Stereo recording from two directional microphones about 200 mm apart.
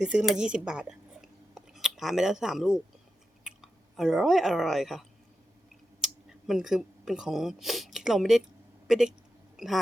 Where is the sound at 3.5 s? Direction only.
5° right (ahead or behind).